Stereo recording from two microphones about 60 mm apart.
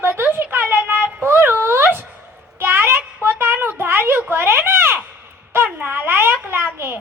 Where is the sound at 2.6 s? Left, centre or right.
Right.